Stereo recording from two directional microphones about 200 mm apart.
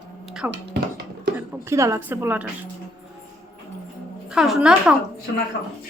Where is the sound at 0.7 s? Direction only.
50° right (ahead or behind).